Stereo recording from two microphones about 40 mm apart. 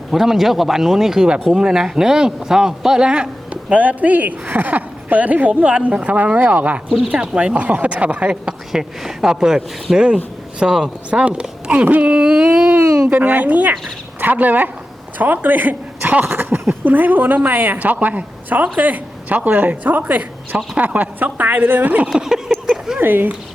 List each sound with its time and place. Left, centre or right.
0.1 s speech: centre
3.1 s speech: right
7.2 s speech: right
7.6 s speech: right
8.7 s speech: centre
11.3 s speech: right
12.7 s a woman's voice: right
22.1 s speech: centre
23.0 s speech: right